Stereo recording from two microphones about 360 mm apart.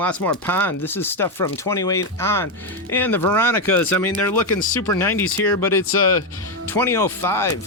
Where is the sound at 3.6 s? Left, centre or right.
Left.